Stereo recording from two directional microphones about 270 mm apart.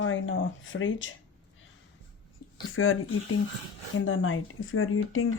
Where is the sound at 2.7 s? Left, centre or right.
Left.